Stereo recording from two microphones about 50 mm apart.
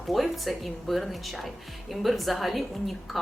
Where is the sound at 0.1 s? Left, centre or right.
Centre.